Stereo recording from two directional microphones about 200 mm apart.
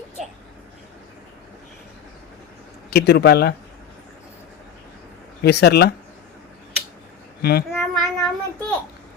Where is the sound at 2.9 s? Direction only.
55° left (ahead or behind).